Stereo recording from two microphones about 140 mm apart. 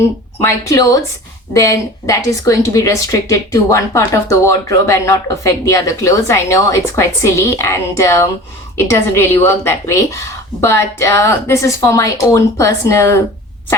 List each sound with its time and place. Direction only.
0.4 s a woman's voice: 25° left (ahead or behind)